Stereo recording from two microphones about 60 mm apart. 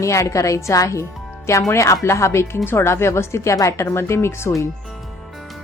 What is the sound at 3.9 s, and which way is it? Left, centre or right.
Speech, left.